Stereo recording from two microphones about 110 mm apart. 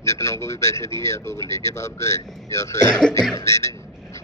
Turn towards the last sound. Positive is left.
turn(degrees=25)  # may be behind; listen again after turning